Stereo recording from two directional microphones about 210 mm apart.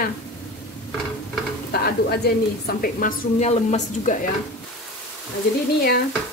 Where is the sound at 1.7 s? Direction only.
50° left (ahead or behind).